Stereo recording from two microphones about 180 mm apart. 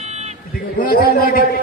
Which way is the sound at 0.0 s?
35° right (ahead or behind).